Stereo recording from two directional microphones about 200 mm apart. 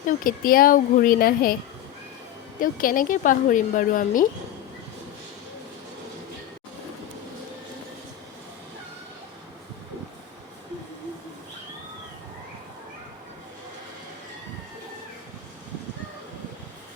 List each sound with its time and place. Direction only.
0.3 s a woman's voice: 45° left (ahead or behind)
2.6 s speech: 45° left (ahead or behind)